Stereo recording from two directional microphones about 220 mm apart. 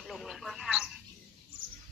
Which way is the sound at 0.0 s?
Centre (ahead or behind).